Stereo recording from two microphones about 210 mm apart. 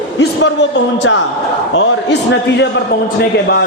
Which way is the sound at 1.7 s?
65° left (ahead or behind).